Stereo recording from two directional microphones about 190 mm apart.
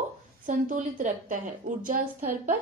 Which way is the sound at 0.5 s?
45° right (ahead or behind).